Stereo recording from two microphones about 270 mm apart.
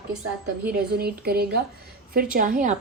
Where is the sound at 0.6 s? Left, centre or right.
Right.